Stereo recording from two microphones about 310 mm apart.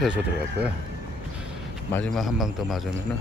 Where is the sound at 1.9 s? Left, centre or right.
Centre.